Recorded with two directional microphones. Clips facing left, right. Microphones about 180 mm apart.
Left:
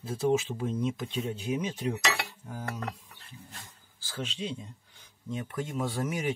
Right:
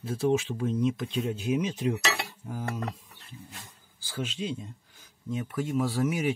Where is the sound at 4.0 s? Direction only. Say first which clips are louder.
Right 3 dB; 10° right (ahead or behind).